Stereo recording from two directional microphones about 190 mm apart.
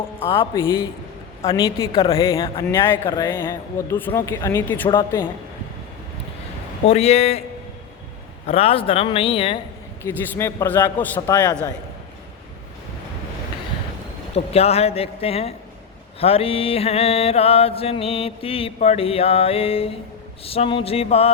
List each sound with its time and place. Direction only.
0.3 s speech: 15° left (ahead or behind)
1.4 s a woman's voice: 30° left (ahead or behind)
2.1 s speech: 15° left (ahead or behind)
4.9 s speech: 25° left (ahead or behind)
6.8 s mantra: 35° left (ahead or behind)
8.4 s speech: 30° left (ahead or behind)
10.0 s speech: 15° left (ahead or behind)
14.3 s mantra: 30° left (ahead or behind)